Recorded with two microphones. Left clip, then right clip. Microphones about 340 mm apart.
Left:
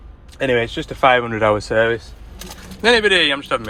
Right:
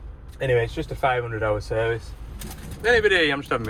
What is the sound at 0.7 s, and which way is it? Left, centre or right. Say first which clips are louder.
Speech: left 9 dB; left.